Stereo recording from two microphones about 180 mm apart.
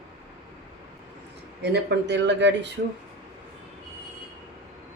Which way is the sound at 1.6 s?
75° right (ahead or behind).